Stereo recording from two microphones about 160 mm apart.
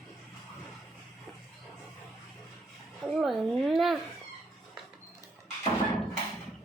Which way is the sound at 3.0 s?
Centre (ahead or behind).